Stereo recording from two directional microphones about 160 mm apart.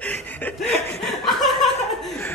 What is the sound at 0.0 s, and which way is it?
Chuckle, 10° left (ahead or behind).